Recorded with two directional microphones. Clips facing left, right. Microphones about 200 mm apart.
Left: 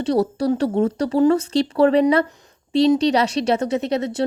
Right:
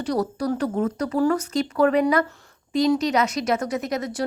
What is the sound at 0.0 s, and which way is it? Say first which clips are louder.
Speech: left 5 dB; 25° left (ahead or behind).